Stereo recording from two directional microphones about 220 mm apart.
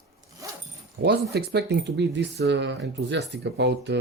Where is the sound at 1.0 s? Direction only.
50° right (ahead or behind).